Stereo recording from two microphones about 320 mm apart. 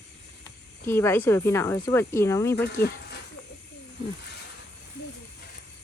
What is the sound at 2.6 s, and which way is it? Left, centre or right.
Speech, left.